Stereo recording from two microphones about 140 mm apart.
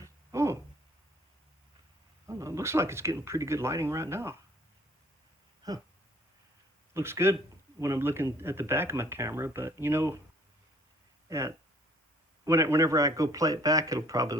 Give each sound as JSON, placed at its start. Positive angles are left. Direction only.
{"t": 0.0, "sound": "a sound", "side_deg": -20}
{"t": 2.2, "sound": "speech", "side_deg": -20}
{"t": 5.6, "sound": "speech", "side_deg": -25}
{"t": 6.9, "sound": "speech", "side_deg": -20}
{"t": 11.3, "sound": "speech", "side_deg": -20}